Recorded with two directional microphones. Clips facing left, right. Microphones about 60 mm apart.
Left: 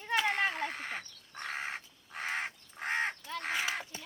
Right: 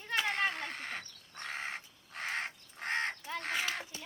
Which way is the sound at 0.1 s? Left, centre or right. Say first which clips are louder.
Left 2 dB; centre.